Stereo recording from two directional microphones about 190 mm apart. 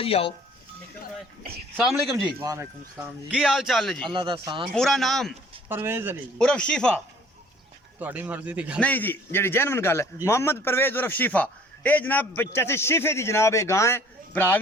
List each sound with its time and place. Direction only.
0.0 s speech: 30° left (ahead or behind)
2.4 s speech: 15° right (ahead or behind); by 4.1 s 5° left (ahead or behind)
4.1 s speech: 25° right (ahead or behind)
4.7 s speech: centre (ahead or behind)
5.6 s a man's voice: 10° right (ahead or behind)
6.4 s speech: 5° left (ahead or behind)
7.9 s a man's voice: 10° right (ahead or behind)
8.8 s a man's voice: 10° left (ahead or behind)